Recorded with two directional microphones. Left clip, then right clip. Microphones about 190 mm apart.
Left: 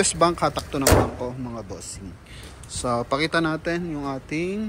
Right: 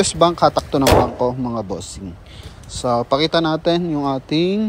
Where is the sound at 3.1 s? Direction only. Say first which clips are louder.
Right 5 dB; 20° right (ahead or behind).